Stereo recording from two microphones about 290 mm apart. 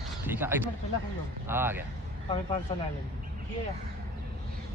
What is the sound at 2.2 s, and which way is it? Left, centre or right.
Speech, centre.